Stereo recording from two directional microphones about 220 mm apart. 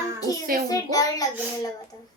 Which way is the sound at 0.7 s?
15° left (ahead or behind).